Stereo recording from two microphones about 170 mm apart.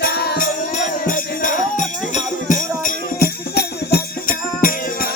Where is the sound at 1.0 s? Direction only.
50° left (ahead or behind).